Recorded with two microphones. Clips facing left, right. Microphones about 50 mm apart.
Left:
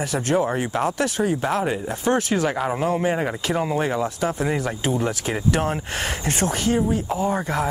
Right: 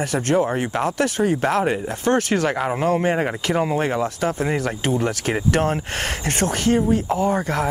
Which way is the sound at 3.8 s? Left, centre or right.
Right.